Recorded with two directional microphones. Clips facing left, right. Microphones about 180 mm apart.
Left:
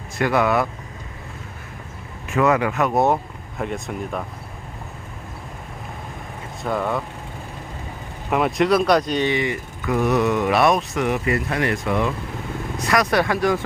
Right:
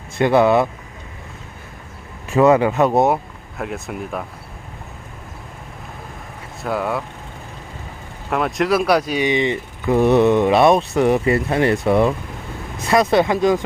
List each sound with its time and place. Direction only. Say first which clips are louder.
0.2 s speech: right 5 dB; 25° right (ahead or behind)
2.3 s speech: right 5 dB; 30° right (ahead or behind)
3.6 s speech: even; 5° right (ahead or behind)
6.6 s speech: right 1 dB; 5° right (ahead or behind)
8.3 s speech: even; centre (ahead or behind); by 13.6 s 20° right (ahead or behind)